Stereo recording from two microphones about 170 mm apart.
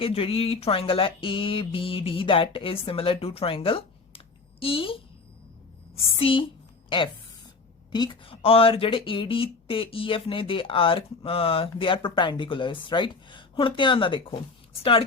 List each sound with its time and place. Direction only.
0.0 s speech: 35° left (ahead or behind)
6.0 s speech: 35° left (ahead or behind)